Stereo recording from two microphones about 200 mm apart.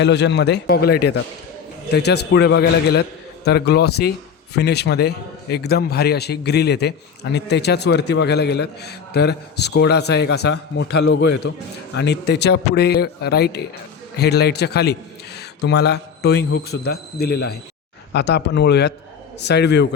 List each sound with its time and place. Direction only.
0.0 s a man's voice: 60° left (ahead or behind)